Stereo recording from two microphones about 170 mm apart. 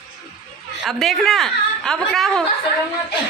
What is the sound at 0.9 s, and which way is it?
A man's voice, centre (ahead or behind).